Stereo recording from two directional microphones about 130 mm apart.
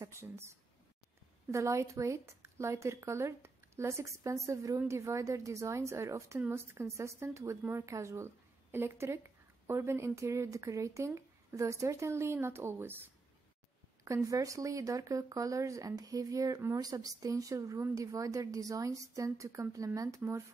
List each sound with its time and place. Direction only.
0.0 s speech: 20° right (ahead or behind)